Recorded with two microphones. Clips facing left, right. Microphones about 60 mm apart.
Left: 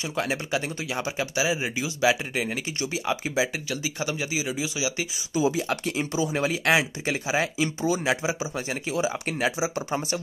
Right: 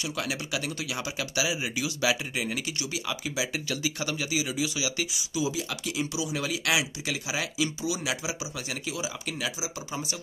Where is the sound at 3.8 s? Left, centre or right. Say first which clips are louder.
Left 2 dB; left.